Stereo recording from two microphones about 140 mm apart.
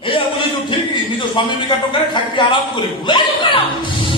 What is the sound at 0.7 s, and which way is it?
A woman's voice, 35° left (ahead or behind).